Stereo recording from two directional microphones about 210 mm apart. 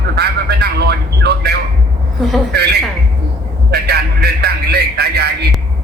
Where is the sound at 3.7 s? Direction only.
50° right (ahead or behind).